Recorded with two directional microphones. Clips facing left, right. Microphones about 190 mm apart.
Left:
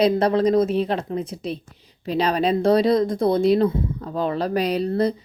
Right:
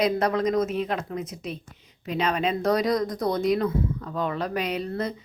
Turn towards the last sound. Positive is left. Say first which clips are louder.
# left 7 dB
turn(degrees=35)  # may be behind; listen again after turning